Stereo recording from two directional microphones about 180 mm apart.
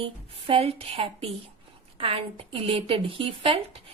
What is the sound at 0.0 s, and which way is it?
A woman's voice, 30° right (ahead or behind).